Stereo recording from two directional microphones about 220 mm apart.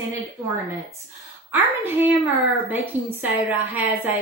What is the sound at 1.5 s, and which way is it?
A woman's voice, 10° right (ahead or behind).